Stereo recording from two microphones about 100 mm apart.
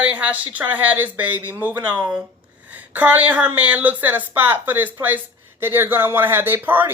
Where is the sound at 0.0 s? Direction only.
15° right (ahead or behind).